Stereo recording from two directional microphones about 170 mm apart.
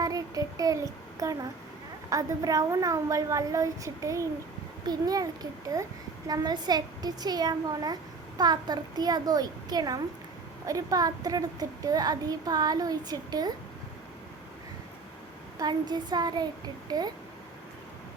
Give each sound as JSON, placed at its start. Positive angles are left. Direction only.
{"t": 0.0, "sound": "a child's voice", "side_deg": -20}
{"t": 15.5, "sound": "a woman's voice", "side_deg": -25}